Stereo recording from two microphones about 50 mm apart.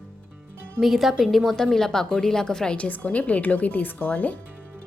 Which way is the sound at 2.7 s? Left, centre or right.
Left.